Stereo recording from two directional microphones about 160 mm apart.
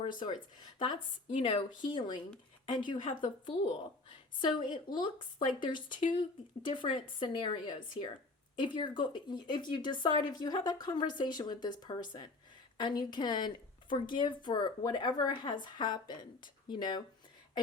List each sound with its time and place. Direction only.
0.0 s a woman's voice: 30° left (ahead or behind)
7.2 s a woman's voice: 30° left (ahead or behind)